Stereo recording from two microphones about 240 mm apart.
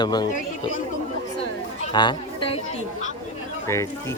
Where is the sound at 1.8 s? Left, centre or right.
Centre.